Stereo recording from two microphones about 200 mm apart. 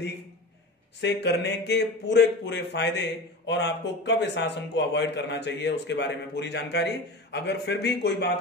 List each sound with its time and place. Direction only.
1.0 s speech: 55° left (ahead or behind)